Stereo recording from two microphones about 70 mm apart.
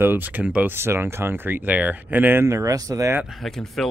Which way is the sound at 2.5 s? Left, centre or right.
Right.